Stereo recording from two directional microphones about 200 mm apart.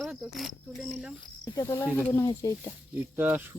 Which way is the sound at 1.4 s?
15° left (ahead or behind).